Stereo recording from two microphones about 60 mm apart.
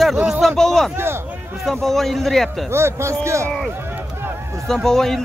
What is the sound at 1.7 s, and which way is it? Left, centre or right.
Speech, centre.